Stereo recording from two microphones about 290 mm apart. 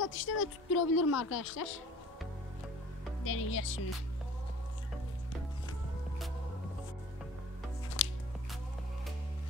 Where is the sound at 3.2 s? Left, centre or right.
Left.